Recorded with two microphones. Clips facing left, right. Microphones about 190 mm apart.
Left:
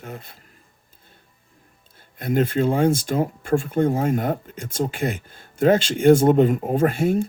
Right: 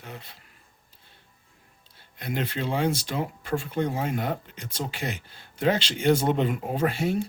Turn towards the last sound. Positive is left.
turn(degrees=50)  # may be behind; listen again after turning